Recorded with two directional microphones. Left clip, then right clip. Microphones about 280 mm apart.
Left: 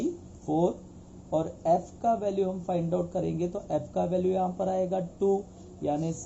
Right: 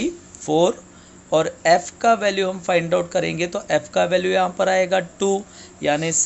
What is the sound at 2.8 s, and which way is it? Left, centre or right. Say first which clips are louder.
Speech: right 10 dB; right.